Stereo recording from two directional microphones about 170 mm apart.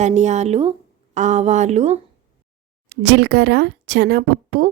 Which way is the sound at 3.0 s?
85° right.